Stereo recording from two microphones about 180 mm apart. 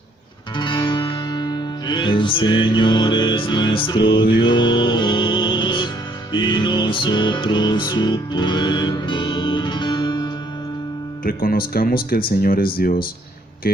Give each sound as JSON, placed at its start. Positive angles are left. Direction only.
{"t": 0.5, "sound": "music", "side_deg": 25}
{"t": 11.3, "sound": "speech", "side_deg": 55}